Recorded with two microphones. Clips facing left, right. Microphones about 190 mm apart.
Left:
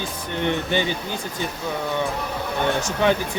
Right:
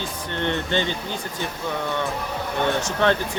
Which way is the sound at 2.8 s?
10° left (ahead or behind).